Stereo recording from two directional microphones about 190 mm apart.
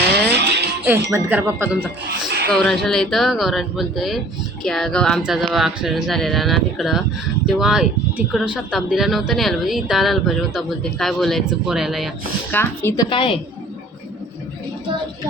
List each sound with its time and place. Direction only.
0.1 s music: 60° right (ahead or behind)
0.9 s speech: 10° right (ahead or behind)
2.5 s speech: 5° left (ahead or behind)
12.5 s a woman's voice: 10° left (ahead or behind)
13.1 s a woman's voice: 25° left (ahead or behind)